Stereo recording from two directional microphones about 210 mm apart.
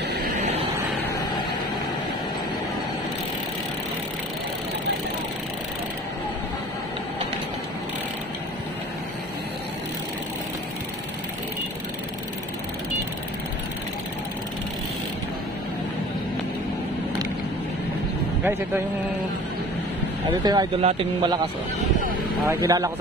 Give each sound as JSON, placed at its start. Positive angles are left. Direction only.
{"t": 20.4, "sound": "speech", "side_deg": -20}
{"t": 22.5, "sound": "speech", "side_deg": -15}